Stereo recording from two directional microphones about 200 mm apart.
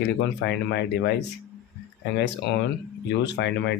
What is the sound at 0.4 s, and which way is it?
Speech, 60° left (ahead or behind).